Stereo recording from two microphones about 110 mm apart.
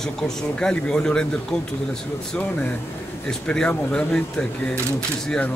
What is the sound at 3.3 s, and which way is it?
Speech, 10° left (ahead or behind).